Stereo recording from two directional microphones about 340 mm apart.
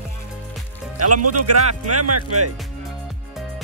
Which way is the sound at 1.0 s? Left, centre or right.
Right.